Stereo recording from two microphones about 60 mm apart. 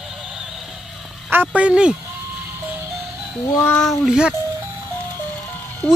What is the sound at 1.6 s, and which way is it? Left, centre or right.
Music, centre.